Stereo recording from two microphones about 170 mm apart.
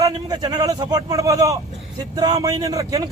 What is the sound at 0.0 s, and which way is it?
A man's voice, 20° right (ahead or behind).